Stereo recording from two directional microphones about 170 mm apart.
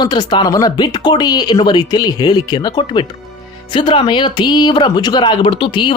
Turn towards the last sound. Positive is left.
turn(degrees=30)  # may be behind; listen again after turning